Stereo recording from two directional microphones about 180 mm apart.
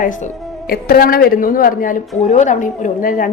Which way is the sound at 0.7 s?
55° left (ahead or behind).